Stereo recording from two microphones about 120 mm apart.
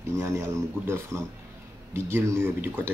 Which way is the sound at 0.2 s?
20° right (ahead or behind).